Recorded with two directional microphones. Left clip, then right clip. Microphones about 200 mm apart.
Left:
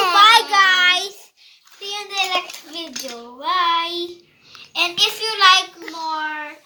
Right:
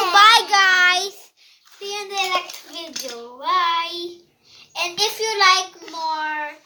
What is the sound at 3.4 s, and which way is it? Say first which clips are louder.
Child singing: left 1 dB; 20° right (ahead or behind).